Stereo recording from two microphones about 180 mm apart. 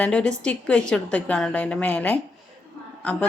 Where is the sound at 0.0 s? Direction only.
5° left (ahead or behind).